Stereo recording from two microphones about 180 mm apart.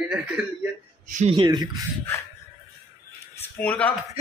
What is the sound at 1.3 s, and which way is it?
Speech, 25° right (ahead or behind).